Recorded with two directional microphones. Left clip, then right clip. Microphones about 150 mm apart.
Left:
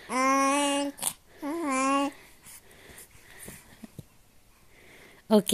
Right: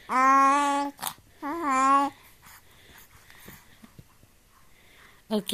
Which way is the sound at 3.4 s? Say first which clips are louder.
Left 3 dB; 55° left (ahead or behind).